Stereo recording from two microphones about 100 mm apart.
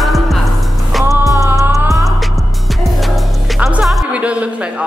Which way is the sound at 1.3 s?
35° right (ahead or behind).